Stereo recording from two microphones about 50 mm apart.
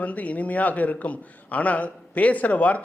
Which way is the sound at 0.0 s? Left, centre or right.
Left.